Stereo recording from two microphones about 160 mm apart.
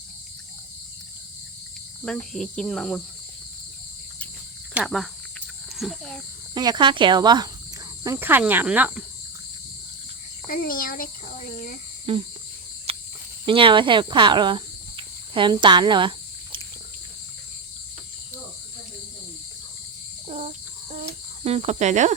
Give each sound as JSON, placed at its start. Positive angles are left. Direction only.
{"t": 2.0, "sound": "speech", "side_deg": 5}
{"t": 4.7, "sound": "speech", "side_deg": 0}
{"t": 6.5, "sound": "speech", "side_deg": -25}
{"t": 8.0, "sound": "cricket", "side_deg": -15}
{"t": 10.5, "sound": "a child's voice", "side_deg": 65}
{"t": 12.1, "sound": "cricket", "side_deg": -35}
{"t": 13.4, "sound": "speech", "side_deg": -30}
{"t": 20.2, "sound": "a sound", "side_deg": -45}
{"t": 20.9, "sound": "cricket", "side_deg": -45}